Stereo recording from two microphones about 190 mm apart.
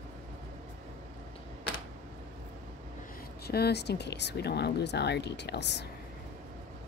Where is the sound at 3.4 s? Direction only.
55° left (ahead or behind).